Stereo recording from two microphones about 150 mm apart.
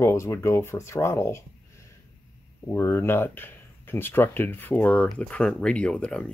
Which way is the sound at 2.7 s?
15° left (ahead or behind).